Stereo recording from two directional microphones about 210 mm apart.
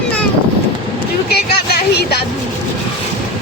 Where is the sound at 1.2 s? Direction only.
50° left (ahead or behind).